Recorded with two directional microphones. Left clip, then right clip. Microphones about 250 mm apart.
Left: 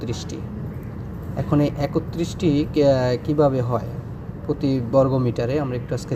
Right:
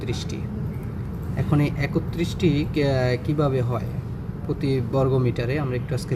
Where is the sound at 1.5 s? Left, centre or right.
Centre.